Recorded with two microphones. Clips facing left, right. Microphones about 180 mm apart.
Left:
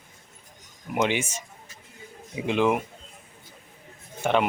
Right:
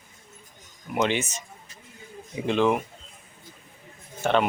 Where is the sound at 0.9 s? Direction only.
15° left (ahead or behind).